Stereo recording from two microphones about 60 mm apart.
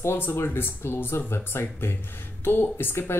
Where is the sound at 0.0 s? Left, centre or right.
Left.